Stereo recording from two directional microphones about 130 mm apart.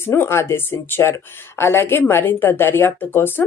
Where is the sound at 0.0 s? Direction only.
20° left (ahead or behind).